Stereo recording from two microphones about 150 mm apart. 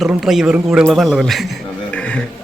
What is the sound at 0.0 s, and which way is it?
A man's voice, centre (ahead or behind).